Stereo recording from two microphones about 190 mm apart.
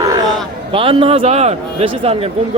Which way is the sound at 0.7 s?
25° right (ahead or behind).